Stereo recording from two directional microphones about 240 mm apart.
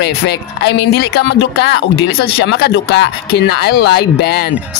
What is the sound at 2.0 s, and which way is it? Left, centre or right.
Speech, left.